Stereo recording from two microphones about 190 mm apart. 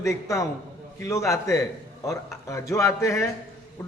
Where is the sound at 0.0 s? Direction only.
15° left (ahead or behind).